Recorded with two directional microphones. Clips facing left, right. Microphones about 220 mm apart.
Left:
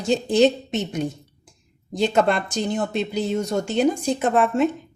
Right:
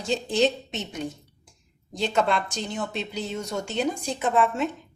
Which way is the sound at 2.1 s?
50° left (ahead or behind).